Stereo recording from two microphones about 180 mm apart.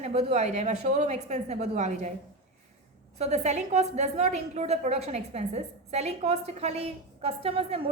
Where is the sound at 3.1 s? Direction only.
35° right (ahead or behind).